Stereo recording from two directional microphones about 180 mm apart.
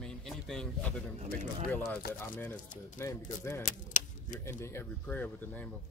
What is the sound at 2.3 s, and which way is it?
Speech, 10° left (ahead or behind).